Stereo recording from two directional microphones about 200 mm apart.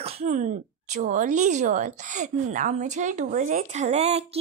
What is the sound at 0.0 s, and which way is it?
Throat clearing, 30° right (ahead or behind).